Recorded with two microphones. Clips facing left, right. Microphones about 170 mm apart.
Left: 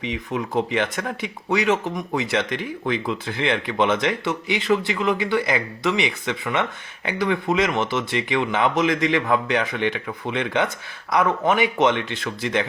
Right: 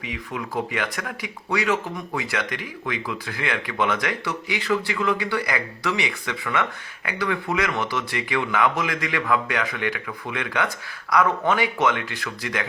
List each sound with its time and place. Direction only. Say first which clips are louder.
0.0 s speech: left 5 dB; 25° left (ahead or behind)